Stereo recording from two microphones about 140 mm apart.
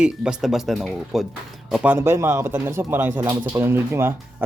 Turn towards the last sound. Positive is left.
turn(degrees=-15)  # may be behind; listen again after turning